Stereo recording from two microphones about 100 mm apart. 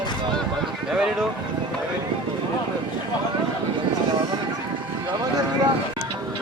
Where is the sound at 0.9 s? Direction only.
5° right (ahead or behind).